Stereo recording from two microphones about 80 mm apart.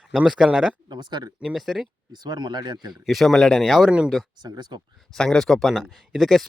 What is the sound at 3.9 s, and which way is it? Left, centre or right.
Speech, centre.